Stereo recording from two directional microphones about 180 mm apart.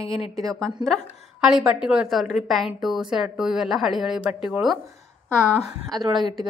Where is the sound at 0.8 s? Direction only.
Centre (ahead or behind).